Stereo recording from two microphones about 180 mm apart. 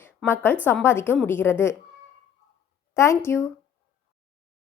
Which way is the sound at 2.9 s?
15° left (ahead or behind).